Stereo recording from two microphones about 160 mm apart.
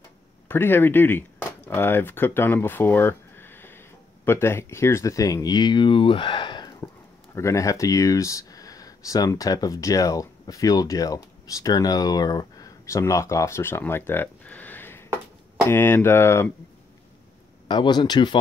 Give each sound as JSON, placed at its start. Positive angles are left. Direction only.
{"t": 0.5, "sound": "speech", "side_deg": 15}
{"t": 17.6, "sound": "speech", "side_deg": 25}